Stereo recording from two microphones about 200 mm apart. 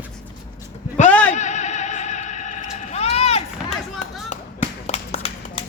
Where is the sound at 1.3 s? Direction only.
35° left (ahead or behind).